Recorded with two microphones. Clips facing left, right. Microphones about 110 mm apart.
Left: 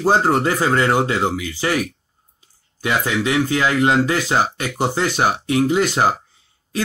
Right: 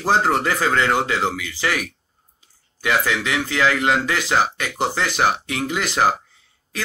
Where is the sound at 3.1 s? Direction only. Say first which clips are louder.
Left 4 dB; 25° left (ahead or behind).